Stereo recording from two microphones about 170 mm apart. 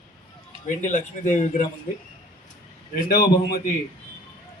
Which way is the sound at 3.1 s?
55° left (ahead or behind).